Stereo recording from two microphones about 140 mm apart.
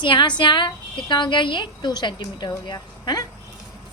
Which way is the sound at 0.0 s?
35° left (ahead or behind).